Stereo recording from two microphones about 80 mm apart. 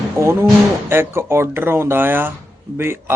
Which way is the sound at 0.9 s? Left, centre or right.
Right.